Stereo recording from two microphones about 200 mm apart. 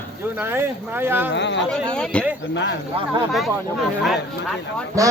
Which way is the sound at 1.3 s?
60° left (ahead or behind).